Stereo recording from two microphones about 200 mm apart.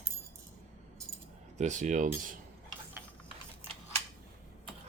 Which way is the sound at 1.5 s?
35° right (ahead or behind).